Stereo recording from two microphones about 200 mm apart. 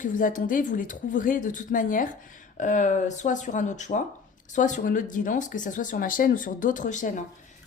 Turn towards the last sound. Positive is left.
turn(degrees=40)  # may be behind; listen again after turning